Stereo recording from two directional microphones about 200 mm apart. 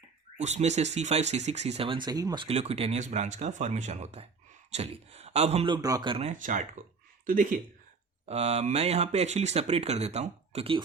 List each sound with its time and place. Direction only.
0.3 s speech: 35° right (ahead or behind)
6.4 s speech: 40° right (ahead or behind)